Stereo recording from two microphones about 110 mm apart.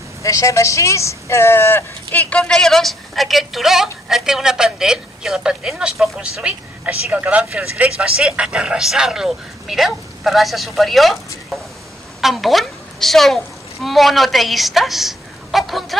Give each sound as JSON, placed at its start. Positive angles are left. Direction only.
{"t": 0.2, "sound": "a woman's voice", "side_deg": 30}
{"t": 12.2, "sound": "a woman's voice", "side_deg": 0}